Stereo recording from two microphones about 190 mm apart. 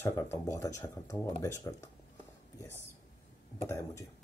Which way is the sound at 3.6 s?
15° left (ahead or behind).